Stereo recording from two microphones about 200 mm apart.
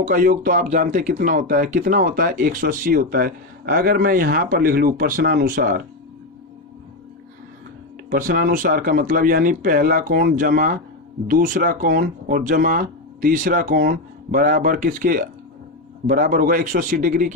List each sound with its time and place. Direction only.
0.0 s speech: 40° right (ahead or behind)
8.1 s speech: 45° right (ahead or behind)